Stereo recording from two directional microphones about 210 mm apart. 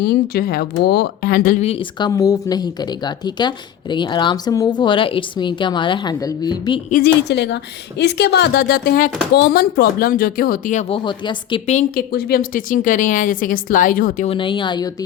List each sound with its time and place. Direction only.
0.0 s speech: 50° left (ahead or behind); by 6.7 s 20° left (ahead or behind)
6.9 s a woman's voice: 50° left (ahead or behind)
14.3 s speech: 25° left (ahead or behind)